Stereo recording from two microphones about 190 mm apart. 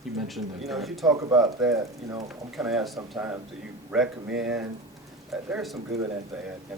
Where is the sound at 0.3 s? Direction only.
Centre (ahead or behind).